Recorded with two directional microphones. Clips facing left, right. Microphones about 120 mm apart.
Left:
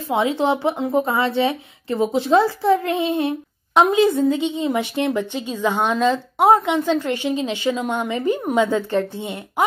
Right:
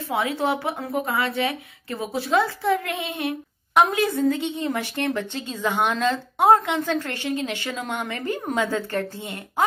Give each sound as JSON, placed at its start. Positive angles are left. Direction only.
{"t": 0.1, "sound": "a woman's voice", "side_deg": 25}
{"t": 3.7, "sound": "a woman's voice", "side_deg": 20}